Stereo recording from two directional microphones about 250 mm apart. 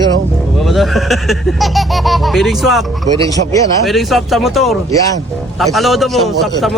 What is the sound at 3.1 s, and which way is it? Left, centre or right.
Speech, centre.